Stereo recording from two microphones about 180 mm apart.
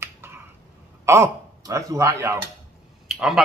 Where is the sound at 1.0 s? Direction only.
15° right (ahead or behind).